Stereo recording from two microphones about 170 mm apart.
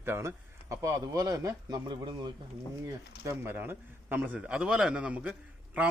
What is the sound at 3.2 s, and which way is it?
A man's voice, 15° right (ahead or behind).